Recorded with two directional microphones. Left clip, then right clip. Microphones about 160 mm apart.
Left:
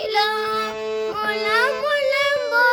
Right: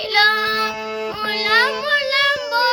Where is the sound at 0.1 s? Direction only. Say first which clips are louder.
Right 6 dB; 10° left (ahead or behind).